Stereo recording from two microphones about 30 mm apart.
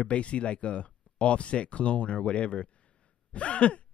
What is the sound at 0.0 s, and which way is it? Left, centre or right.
Speech, left.